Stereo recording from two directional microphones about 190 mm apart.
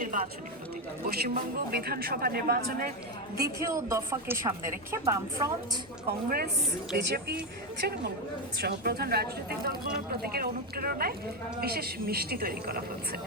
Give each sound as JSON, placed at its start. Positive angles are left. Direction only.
{"t": 0.0, "sound": "a sound", "side_deg": -45}
{"t": 1.0, "sound": "speech", "side_deg": -55}
{"t": 3.4, "sound": "a woman's voice", "side_deg": -15}
{"t": 6.1, "sound": "a woman's voice", "side_deg": -55}